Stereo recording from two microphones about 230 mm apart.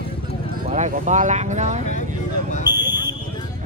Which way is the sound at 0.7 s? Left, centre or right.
Right.